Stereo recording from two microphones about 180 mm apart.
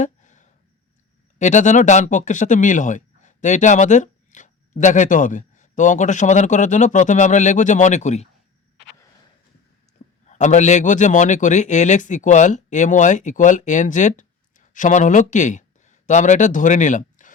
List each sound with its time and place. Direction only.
0.0 s a sound: 45° left (ahead or behind)
1.4 s speech: 40° left (ahead or behind)
10.2 s a man's voice: 40° left (ahead or behind)